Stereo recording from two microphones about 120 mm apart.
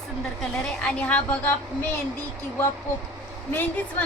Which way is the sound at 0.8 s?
10° left (ahead or behind).